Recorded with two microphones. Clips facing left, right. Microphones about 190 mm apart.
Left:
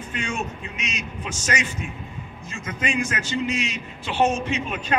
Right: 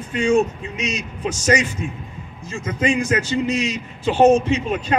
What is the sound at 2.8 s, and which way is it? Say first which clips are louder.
A man's voice: right 7 dB; 35° right (ahead or behind).